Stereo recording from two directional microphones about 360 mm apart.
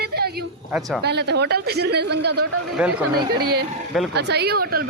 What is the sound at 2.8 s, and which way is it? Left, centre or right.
Speech, centre.